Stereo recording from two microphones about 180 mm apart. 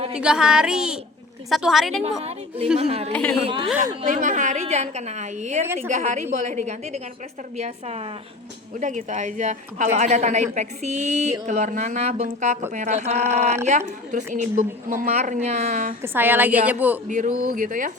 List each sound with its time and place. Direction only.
0.1 s a woman's voice: 5° right (ahead or behind)
2.7 s speech: 35° right (ahead or behind)
3.1 s a woman's voice: 10° left (ahead or behind)
3.4 s speech: 30° right (ahead or behind)
4.0 s speech: 45° right (ahead or behind)
5.6 s a woman's voice: 15° right (ahead or behind)
5.9 s speech: 40° right (ahead or behind)
16.1 s a woman's voice: 10° right (ahead or behind)
17.1 s speech: 45° right (ahead or behind)